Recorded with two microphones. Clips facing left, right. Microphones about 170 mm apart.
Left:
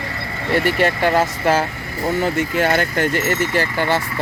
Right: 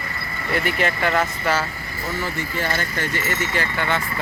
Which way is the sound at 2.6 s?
60° left (ahead or behind).